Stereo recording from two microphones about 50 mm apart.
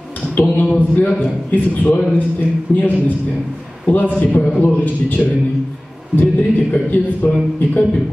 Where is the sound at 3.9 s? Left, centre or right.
Left.